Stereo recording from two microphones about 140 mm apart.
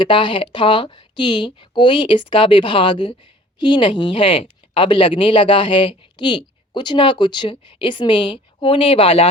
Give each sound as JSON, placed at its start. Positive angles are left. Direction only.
{"t": 0.0, "sound": "speech", "side_deg": 35}